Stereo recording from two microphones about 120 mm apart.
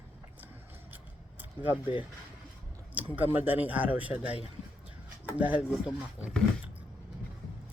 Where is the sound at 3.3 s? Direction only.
15° right (ahead or behind).